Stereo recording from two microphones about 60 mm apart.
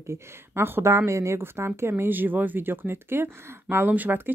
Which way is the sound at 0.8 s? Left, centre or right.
Right.